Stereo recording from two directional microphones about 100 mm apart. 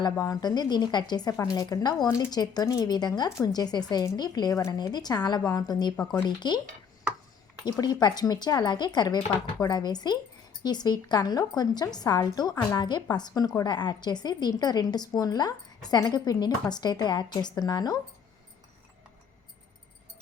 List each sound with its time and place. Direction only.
0.0 s a woman's voice: 40° left (ahead or behind)
7.6 s a woman's voice: 40° left (ahead or behind)